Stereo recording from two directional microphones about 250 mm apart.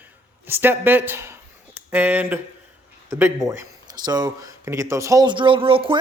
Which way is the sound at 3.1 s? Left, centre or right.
Centre.